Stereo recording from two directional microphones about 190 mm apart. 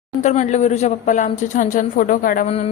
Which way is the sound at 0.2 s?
40° left (ahead or behind).